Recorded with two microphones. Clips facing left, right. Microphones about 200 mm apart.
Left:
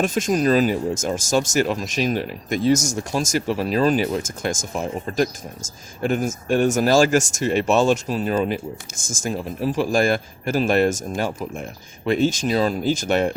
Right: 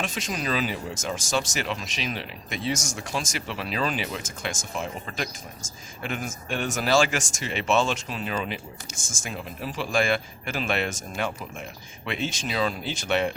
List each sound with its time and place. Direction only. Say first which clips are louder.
0.0 s speech: left 11 dB; 45° left (ahead or behind)